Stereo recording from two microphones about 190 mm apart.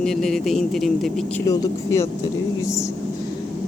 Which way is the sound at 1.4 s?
20° left (ahead or behind).